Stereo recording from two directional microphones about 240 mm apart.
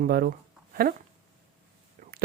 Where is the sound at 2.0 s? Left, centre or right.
Right.